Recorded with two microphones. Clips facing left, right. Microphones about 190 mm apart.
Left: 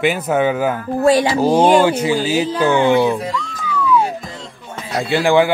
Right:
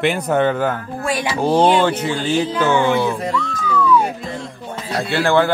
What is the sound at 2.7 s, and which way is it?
Speech, 15° left (ahead or behind).